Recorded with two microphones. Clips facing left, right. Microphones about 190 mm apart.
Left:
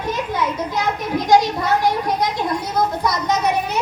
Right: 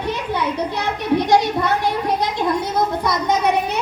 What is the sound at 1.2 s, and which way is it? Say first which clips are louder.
Speech: left 3 dB; 65° right (ahead or behind).